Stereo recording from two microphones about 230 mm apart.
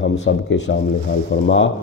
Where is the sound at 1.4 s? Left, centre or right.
Left.